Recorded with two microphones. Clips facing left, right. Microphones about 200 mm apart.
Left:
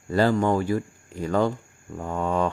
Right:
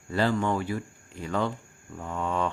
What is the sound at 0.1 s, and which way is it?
Speech, 40° left (ahead or behind).